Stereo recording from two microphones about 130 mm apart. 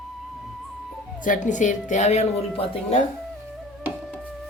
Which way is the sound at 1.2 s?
80° left.